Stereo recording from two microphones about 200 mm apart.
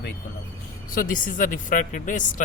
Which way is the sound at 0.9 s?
40° left (ahead or behind).